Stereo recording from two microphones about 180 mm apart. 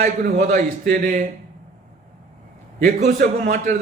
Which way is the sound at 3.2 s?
50° right (ahead or behind).